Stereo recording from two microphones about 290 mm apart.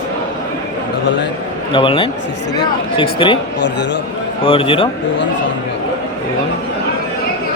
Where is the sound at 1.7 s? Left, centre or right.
Centre.